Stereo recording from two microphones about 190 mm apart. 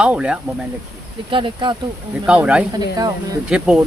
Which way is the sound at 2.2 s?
5° right (ahead or behind).